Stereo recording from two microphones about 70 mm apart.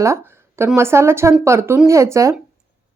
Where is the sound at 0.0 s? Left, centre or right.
Right.